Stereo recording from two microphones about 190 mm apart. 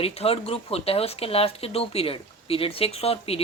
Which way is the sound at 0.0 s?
30° left (ahead or behind).